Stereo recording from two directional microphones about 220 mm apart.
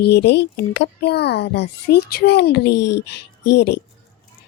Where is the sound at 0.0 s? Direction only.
45° left (ahead or behind).